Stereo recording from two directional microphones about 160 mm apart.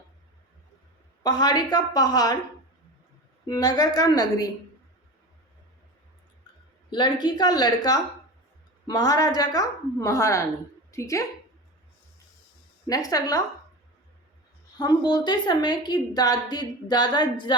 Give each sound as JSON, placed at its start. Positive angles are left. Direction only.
{"t": 1.2, "sound": "a woman's voice", "side_deg": 25}
{"t": 3.4, "sound": "a woman's voice", "side_deg": 25}
{"t": 6.9, "sound": "a woman's voice", "side_deg": 30}
{"t": 12.9, "sound": "a woman's voice", "side_deg": 20}
{"t": 14.8, "sound": "a woman's voice", "side_deg": 25}